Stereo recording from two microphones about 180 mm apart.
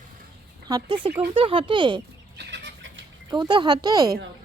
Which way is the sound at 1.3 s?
30° right (ahead or behind).